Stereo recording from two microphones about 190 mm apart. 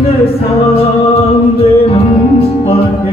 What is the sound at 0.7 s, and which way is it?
Music, 30° left (ahead or behind).